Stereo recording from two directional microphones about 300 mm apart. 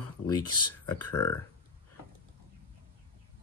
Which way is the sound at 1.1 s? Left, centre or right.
Centre.